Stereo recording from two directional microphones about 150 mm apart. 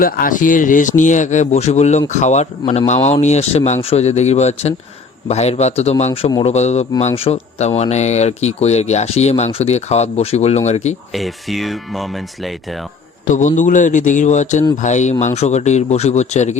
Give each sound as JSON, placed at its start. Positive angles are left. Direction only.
{"t": 0.0, "sound": "speech", "side_deg": 65}
{"t": 11.1, "sound": "speech", "side_deg": 0}
{"t": 13.2, "sound": "a man's voice", "side_deg": 55}